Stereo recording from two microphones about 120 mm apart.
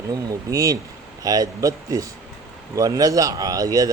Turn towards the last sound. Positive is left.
turn(degrees=-30)  # may be behind; listen again after turning